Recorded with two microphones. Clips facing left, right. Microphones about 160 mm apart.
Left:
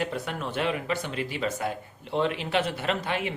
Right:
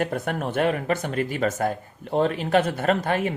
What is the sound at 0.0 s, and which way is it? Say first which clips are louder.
Speech: right 5 dB; 50° right (ahead or behind).